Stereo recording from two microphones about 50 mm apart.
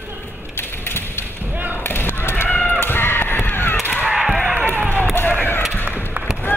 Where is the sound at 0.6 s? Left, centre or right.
Left.